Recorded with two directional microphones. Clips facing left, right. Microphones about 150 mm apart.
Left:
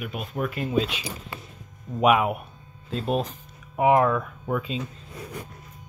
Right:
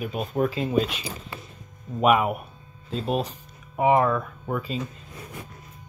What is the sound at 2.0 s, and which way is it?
Speech, centre (ahead or behind).